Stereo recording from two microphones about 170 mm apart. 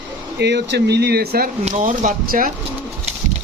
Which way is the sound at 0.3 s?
85° right.